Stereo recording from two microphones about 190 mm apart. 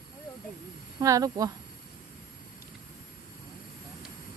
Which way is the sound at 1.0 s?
20° right (ahead or behind).